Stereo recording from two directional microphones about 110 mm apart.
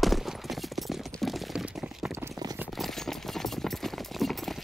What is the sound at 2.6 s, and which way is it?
Clip-clop, centre (ahead or behind).